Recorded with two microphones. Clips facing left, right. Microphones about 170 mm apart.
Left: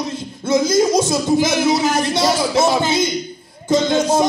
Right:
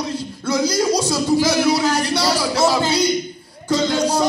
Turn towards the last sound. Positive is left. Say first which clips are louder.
# left 3 dB
turn(degrees=25)  # may be behind; listen again after turning